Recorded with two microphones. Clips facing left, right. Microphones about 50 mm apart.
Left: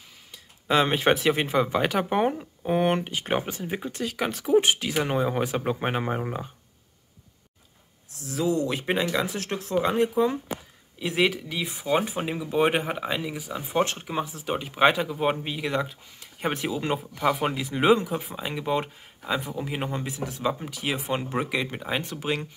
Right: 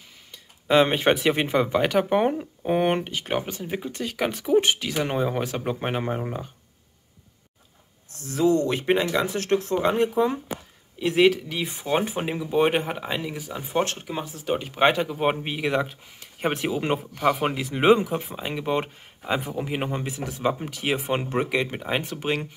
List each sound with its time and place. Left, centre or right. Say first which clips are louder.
0.3 s speech: right 3 dB; centre
3.1 s speech: even; centre
8.2 s speech: right 4 dB; centre
15.1 s a man's voice: right 2 dB; centre
15.6 s speech: right 5 dB; centre
20.1 s speech: right 2 dB; centre